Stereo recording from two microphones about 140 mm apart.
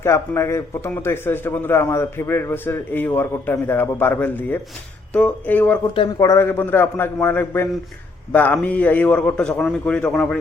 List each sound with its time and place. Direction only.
0.0 s a man's voice: 20° left (ahead or behind)
6.1 s a man's voice: 20° left (ahead or behind)